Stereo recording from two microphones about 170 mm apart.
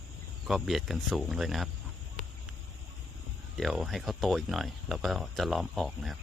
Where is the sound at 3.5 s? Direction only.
Centre (ahead or behind).